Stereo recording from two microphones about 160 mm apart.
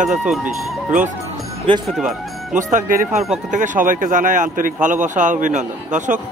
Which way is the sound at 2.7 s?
55° right (ahead or behind).